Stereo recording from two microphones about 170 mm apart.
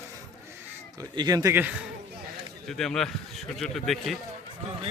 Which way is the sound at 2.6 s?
Centre (ahead or behind).